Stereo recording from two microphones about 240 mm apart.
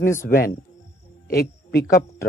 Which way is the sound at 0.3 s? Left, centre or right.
Left.